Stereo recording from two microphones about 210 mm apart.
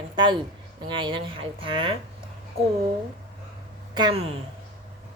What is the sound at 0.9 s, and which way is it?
A woman's voice, 25° right (ahead or behind).